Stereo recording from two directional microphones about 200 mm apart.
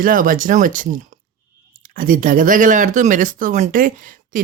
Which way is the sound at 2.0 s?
40° right (ahead or behind).